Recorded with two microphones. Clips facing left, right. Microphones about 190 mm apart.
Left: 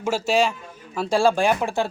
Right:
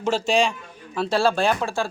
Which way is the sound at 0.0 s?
5° left (ahead or behind).